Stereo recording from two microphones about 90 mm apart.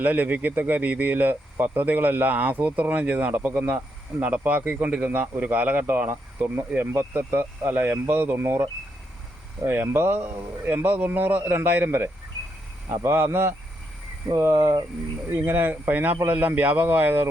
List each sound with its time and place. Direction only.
0.0 s speech: 20° right (ahead or behind)
9.6 s speech: 25° right (ahead or behind)